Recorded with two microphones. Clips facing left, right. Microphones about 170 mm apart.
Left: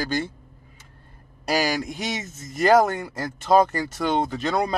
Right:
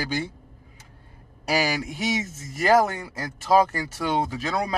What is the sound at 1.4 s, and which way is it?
A man's voice, 10° right (ahead or behind).